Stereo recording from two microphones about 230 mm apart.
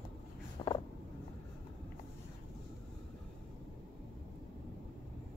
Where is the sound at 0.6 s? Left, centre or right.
Left.